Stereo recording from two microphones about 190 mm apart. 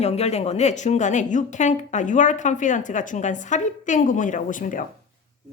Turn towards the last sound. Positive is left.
turn(degrees=45)  # may be behind; listen again after turning